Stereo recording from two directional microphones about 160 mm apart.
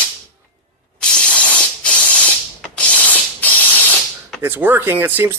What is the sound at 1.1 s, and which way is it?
Spray, 10° left (ahead or behind).